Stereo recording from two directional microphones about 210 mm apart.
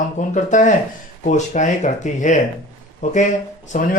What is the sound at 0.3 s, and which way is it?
Speech, 35° left (ahead or behind).